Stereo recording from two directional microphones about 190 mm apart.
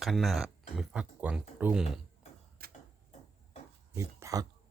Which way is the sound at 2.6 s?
50° right (ahead or behind).